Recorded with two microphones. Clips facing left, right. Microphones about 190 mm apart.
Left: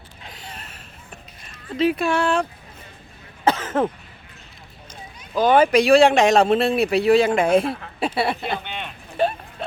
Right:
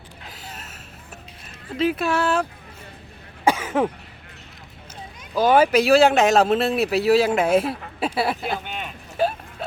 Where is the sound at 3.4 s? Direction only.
10° right (ahead or behind).